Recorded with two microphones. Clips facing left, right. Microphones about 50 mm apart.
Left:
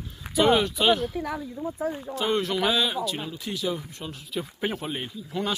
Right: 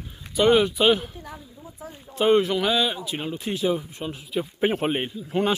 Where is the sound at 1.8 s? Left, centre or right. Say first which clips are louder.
Left 9 dB; left.